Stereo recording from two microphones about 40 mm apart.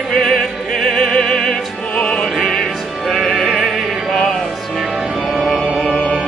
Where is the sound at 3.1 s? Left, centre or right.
Centre.